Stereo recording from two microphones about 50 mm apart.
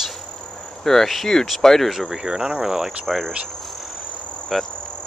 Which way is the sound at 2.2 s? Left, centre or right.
Centre.